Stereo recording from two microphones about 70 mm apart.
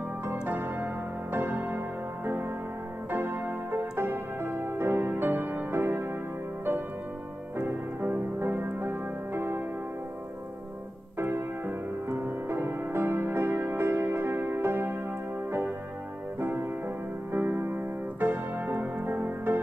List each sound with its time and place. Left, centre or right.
0.3 s music: right
3.1 s piano: right
4.0 s music: right
7.5 s music: right
11.1 s music: right
16.3 s music: right
17.3 s piano: right